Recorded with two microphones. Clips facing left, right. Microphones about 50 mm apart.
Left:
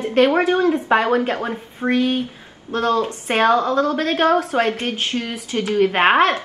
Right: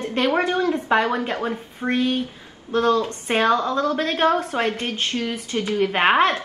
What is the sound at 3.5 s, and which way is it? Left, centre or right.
A woman's voice, centre.